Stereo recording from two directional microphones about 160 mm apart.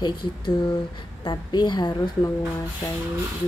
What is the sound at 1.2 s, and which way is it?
A woman's voice, 30° left (ahead or behind).